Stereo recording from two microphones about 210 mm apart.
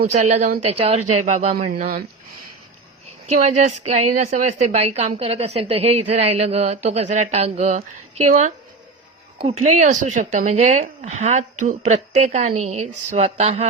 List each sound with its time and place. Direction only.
0.1 s a woman's voice: 30° right (ahead or behind)
1.7 s speech: 45° right (ahead or behind)
3.2 s a woman's voice: 35° right (ahead or behind)